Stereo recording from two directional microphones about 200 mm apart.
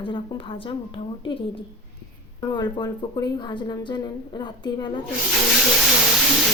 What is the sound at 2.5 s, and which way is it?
Speech, 20° left (ahead or behind).